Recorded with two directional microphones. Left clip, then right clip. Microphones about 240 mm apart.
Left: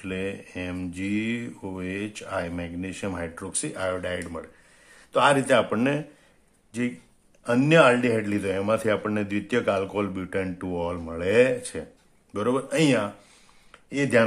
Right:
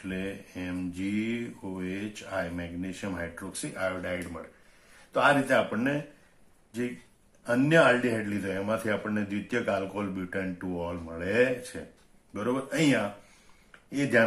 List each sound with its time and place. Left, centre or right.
0.1 s a man's voice: left
7.4 s a man's voice: left